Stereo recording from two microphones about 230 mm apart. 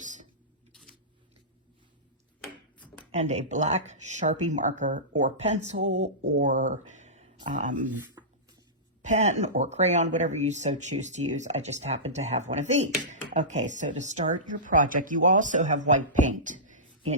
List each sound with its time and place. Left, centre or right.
0.0 s tick-tock: right
3.1 s speech: right
8.2 s a sound: centre
9.0 s speech: right